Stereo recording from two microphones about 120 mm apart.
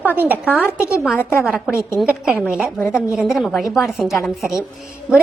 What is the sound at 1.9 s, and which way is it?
Speech, 5° right (ahead or behind).